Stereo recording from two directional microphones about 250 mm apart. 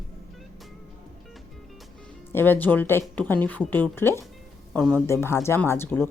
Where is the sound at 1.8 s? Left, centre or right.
Centre.